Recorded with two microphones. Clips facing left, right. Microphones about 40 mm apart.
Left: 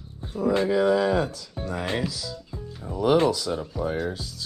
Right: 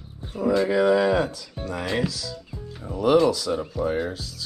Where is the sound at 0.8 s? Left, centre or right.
Right.